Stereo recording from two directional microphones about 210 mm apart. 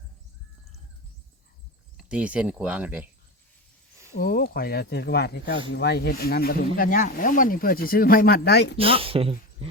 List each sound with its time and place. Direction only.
2.0 s speech: 5° right (ahead or behind)
4.2 s speech: 45° left (ahead or behind)
8.8 s speech: 25° right (ahead or behind)